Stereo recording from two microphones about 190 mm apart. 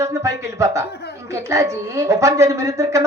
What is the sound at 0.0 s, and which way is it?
A woman's voice, 15° right (ahead or behind).